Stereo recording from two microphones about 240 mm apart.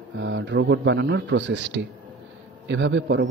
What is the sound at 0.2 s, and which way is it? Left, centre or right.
A man's voice, right.